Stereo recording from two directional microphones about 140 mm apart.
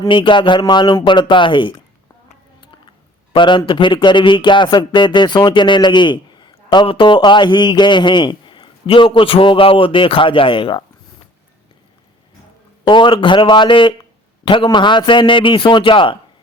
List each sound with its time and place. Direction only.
0.1 s speech: 35° left (ahead or behind)
3.3 s speech: 35° left (ahead or behind)
12.8 s speech: 35° left (ahead or behind)